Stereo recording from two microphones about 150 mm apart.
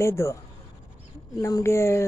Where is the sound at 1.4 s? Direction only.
20° left (ahead or behind).